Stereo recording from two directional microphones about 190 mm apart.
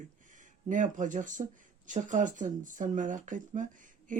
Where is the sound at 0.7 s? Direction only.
40° right (ahead or behind).